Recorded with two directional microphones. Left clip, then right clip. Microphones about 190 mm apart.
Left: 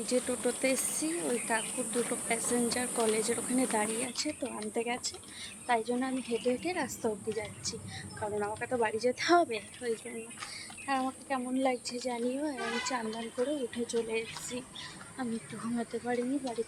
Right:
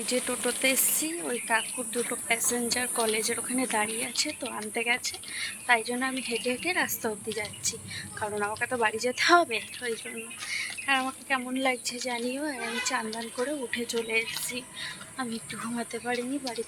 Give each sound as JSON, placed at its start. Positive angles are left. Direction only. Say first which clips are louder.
{"t": 0.0, "sound": "speech", "louder": "right 2 dB", "side_deg": 0}
{"t": 15.8, "sound": "speech", "louder": "right 2 dB", "side_deg": 5}